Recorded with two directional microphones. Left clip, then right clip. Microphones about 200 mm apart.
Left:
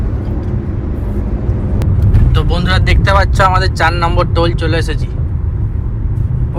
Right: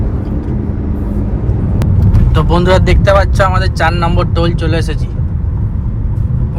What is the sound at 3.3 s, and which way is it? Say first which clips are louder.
Speech: left 1 dB; 10° right (ahead or behind).